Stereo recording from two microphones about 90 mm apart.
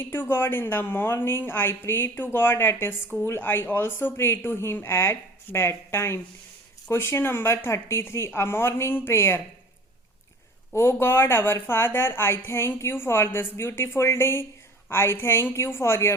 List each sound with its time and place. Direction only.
0.0 s a woman's voice: 25° left (ahead or behind)
10.7 s a woman's voice: 25° left (ahead or behind)